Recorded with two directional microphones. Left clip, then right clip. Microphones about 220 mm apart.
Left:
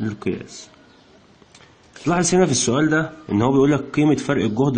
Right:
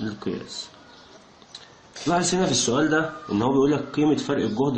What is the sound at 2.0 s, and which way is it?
Speech, 50° left (ahead or behind).